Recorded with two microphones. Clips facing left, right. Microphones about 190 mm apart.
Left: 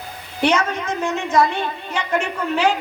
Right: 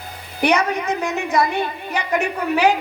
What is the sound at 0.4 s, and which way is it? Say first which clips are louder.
A woman's voice: right 1 dB; 15° right (ahead or behind).